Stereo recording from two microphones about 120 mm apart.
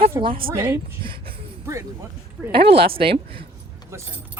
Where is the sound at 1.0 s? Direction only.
45° right (ahead or behind).